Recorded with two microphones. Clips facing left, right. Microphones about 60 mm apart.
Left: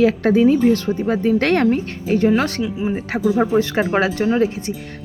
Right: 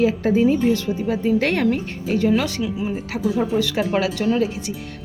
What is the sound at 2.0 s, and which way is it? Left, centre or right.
A woman's voice, left.